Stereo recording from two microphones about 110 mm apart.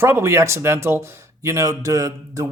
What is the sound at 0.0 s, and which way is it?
Speech, 25° right (ahead or behind).